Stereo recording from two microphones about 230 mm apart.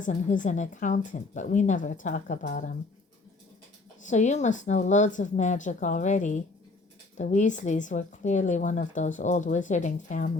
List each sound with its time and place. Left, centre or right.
0.0 s speech: left
4.0 s speech: left